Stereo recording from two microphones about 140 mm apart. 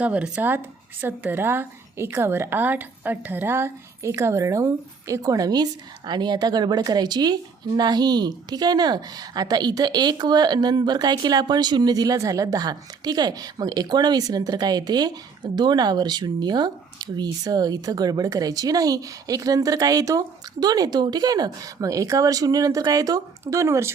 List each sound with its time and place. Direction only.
0.0 s a woman's voice: 10° right (ahead or behind)